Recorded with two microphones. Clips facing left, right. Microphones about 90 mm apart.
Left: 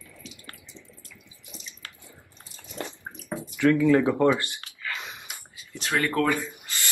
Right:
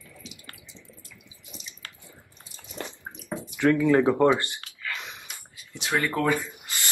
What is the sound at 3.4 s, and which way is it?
Speech, 20° right (ahead or behind).